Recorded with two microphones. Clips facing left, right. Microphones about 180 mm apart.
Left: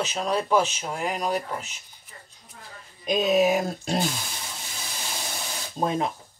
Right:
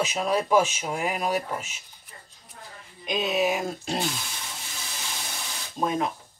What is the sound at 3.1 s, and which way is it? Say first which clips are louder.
Speech: left 4 dB; 40° left (ahead or behind).